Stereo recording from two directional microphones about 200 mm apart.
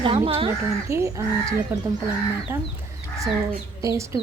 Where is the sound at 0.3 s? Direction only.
30° right (ahead or behind).